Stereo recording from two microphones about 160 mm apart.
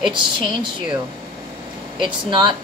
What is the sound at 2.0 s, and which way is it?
Speech, 30° right (ahead or behind).